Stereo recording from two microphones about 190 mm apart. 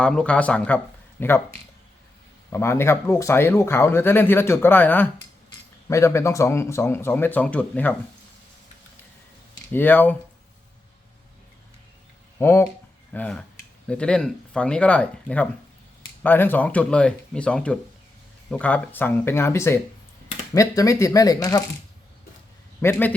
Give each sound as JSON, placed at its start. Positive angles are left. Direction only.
{"t": 0.0, "sound": "speech", "side_deg": 5}
{"t": 2.5, "sound": "speech", "side_deg": 15}
{"t": 9.7, "sound": "speech", "side_deg": 10}
{"t": 12.4, "sound": "speech", "side_deg": 10}
{"t": 22.8, "sound": "speech", "side_deg": 10}